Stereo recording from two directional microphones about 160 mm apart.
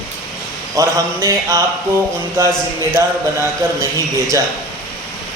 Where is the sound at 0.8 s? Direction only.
20° right (ahead or behind).